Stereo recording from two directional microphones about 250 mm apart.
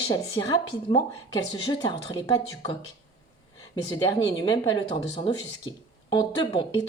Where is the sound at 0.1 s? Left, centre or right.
Centre.